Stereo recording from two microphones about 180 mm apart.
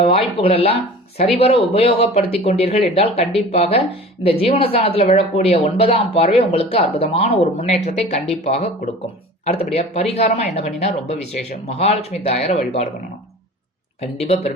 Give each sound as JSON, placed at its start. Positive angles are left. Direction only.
{"t": 0.0, "sound": "speech", "side_deg": 30}
{"t": 14.0, "sound": "speech", "side_deg": 35}